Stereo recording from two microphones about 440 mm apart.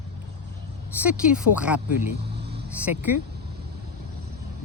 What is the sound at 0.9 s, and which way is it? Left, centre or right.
Speech, centre.